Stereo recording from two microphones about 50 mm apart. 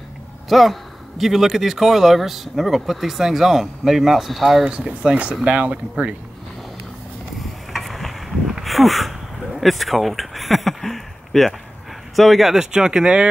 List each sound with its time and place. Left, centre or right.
0.5 s a man's voice: centre
4.6 s speech: right
7.7 s a sound: centre
9.6 s a man's voice: centre